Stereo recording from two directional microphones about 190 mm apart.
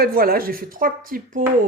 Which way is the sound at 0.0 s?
50° right (ahead or behind).